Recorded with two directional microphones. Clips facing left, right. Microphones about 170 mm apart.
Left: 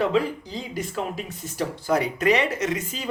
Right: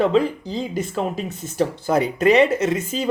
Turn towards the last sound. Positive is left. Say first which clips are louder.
# right 6 dB
turn(degrees=-25)  # may be behind; listen again after turning